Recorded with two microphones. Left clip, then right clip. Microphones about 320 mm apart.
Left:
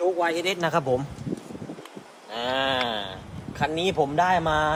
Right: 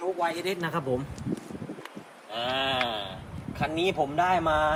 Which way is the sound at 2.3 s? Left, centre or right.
Left.